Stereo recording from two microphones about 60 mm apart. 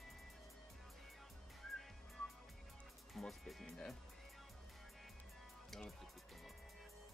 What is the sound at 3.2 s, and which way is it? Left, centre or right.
Speech, centre.